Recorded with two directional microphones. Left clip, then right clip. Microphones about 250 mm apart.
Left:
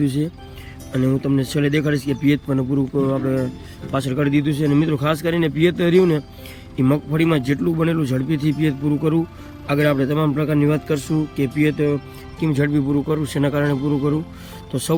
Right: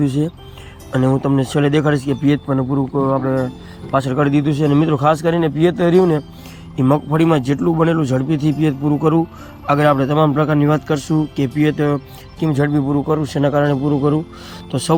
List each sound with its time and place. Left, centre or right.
0.0 s a man's voice: centre
3.9 s a man's voice: centre